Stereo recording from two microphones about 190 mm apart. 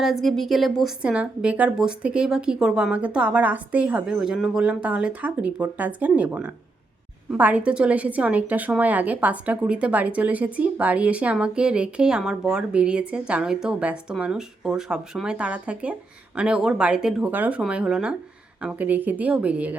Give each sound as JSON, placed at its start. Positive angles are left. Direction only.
{"t": 0.0, "sound": "a woman's voice", "side_deg": 0}